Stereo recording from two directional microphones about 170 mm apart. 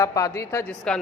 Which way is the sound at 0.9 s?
5° left (ahead or behind).